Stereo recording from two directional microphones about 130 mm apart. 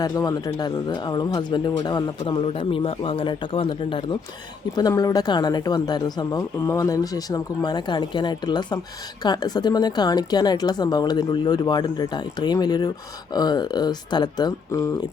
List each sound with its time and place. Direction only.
0.0 s speech: 30° left (ahead or behind)
4.7 s speech: 30° left (ahead or behind)